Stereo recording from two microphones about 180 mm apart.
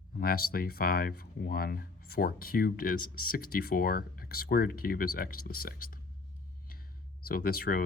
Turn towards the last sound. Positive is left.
turn(degrees=55)  # may be behind; listen again after turning